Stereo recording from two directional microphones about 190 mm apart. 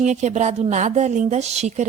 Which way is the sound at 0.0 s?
40° right (ahead or behind).